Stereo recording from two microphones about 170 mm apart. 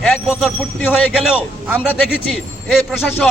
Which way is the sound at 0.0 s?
Centre (ahead or behind).